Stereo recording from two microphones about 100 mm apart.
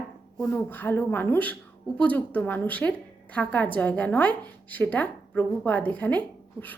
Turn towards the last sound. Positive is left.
turn(degrees=15)  # may be behind; listen again after turning